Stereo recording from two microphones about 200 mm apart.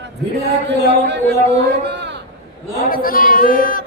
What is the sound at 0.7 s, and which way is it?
A man's voice, 60° right (ahead or behind).